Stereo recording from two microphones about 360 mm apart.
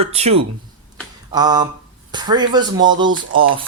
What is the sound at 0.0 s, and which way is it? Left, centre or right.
Speech, centre.